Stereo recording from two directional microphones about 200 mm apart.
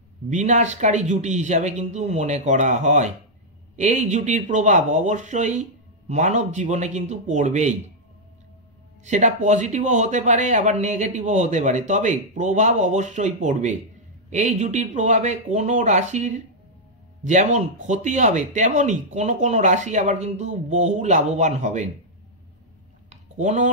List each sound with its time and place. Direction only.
0.3 s a man's voice: 35° right (ahead or behind)
9.0 s a man's voice: 35° right (ahead or behind)
23.0 s a sound: 35° right (ahead or behind)